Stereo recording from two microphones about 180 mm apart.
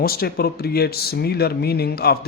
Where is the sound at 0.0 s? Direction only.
60° left (ahead or behind).